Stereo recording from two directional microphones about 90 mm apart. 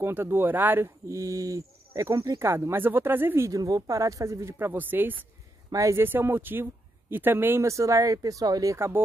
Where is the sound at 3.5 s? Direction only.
40° right (ahead or behind); by 5.2 s 20° right (ahead or behind).